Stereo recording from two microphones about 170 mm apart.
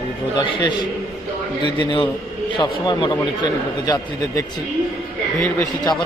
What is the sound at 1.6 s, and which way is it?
Speech, 25° left (ahead or behind).